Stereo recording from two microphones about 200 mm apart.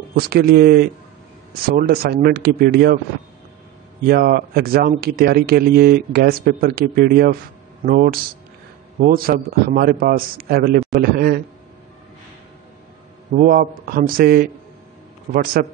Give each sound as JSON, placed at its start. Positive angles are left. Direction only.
{"t": 0.1, "sound": "speech", "side_deg": -50}
{"t": 4.0, "sound": "speech", "side_deg": -50}
{"t": 13.3, "sound": "speech", "side_deg": -45}
{"t": 15.6, "sound": "speech", "side_deg": -50}